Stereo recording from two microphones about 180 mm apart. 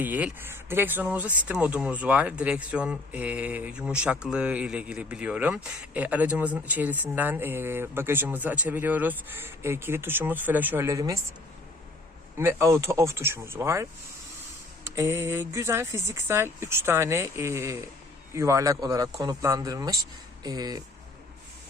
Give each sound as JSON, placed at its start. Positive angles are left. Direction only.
{"t": 0.0, "sound": "speech", "side_deg": -10}
{"t": 12.4, "sound": "speech", "side_deg": -15}
{"t": 14.8, "sound": "speech", "side_deg": -15}